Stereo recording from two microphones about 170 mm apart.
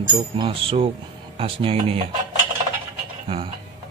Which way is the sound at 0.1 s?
30° right (ahead or behind).